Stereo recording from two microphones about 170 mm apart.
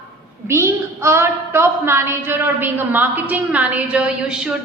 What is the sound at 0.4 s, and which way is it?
A woman's voice, 15° right (ahead or behind).